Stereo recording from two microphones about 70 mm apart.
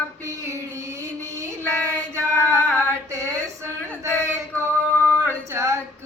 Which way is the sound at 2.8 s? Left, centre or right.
Right.